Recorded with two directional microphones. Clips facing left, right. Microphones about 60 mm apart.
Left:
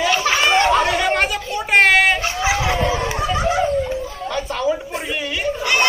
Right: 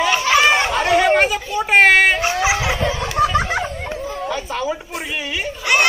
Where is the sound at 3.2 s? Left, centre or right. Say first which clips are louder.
Right 4 dB; right.